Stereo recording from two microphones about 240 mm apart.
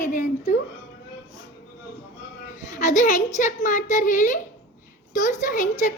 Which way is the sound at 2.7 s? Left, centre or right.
Left.